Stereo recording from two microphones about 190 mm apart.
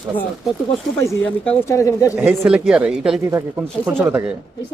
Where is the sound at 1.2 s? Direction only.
10° left (ahead or behind).